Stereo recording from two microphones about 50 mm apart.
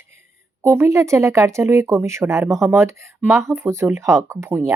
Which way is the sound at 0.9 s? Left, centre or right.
Right.